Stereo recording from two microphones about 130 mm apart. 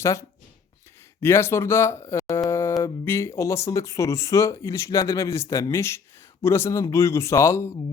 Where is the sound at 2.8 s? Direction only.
20° left (ahead or behind).